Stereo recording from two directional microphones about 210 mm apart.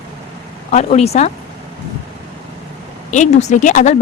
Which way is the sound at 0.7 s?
30° left (ahead or behind).